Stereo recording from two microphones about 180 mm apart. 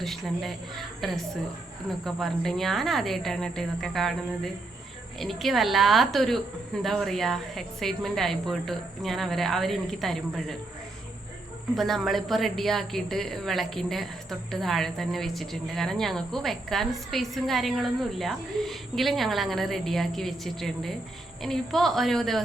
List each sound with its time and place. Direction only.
0.0 s a woman's voice: centre (ahead or behind)
11.7 s speech: centre (ahead or behind)